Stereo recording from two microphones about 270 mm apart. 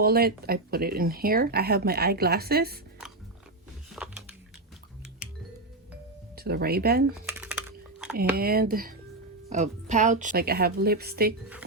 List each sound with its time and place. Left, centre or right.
0.0 s speech: right
3.9 s a sound: centre
6.3 s speech: right
7.3 s typing: centre
8.1 s speech: right